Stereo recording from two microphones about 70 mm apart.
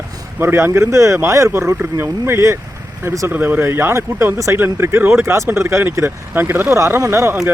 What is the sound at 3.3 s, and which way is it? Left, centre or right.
Speech, right.